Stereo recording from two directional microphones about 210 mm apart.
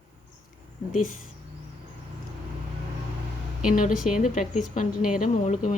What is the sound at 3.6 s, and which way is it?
Speech, 40° left (ahead or behind).